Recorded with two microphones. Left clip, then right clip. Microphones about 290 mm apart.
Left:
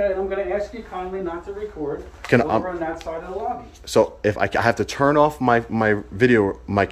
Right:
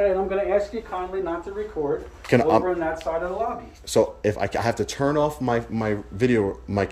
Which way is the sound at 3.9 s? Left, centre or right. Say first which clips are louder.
Left 3 dB; centre.